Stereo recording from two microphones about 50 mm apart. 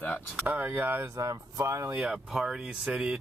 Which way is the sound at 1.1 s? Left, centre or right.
Right.